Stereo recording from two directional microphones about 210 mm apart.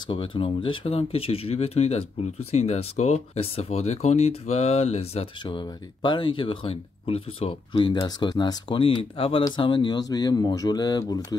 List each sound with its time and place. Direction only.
0.0 s speech: 25° left (ahead or behind)